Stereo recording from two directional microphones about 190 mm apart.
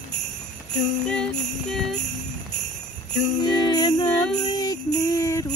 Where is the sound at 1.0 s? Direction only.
5° left (ahead or behind).